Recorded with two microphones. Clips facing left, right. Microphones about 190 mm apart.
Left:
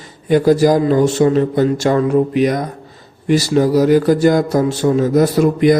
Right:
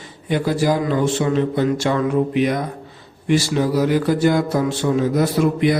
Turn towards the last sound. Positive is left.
turn(degrees=45)  # may be behind; listen again after turning